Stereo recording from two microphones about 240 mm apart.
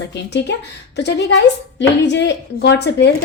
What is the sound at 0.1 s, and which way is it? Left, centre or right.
A woman's voice, left.